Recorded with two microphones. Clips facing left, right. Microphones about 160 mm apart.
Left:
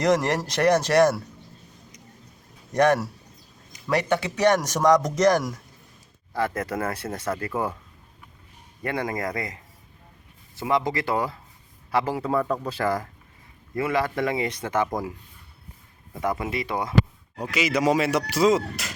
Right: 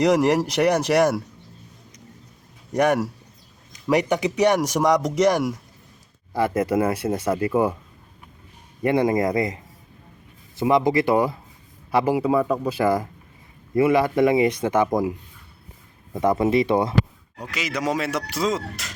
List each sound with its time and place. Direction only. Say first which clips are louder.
0.0 s speech: right 4 dB; 10° right (ahead or behind)
2.7 s speech: even; 10° right (ahead or behind)
8.8 s speech: right 8 dB; 20° right (ahead or behind)
10.6 s speech: right 6 dB; 15° right (ahead or behind)
16.2 s speech: right 8 dB; 25° right (ahead or behind)
17.5 s speech: left 3 dB; 5° left (ahead or behind)